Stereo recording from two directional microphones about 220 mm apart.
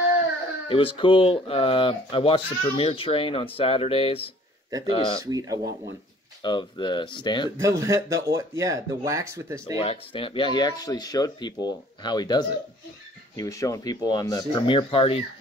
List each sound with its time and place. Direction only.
0.7 s speech: 25° left (ahead or behind)
5.2 s speech: 15° right (ahead or behind)
6.4 s speech: 20° left (ahead or behind)
7.5 s speech: 15° right (ahead or behind)
9.8 s speech: 25° left (ahead or behind)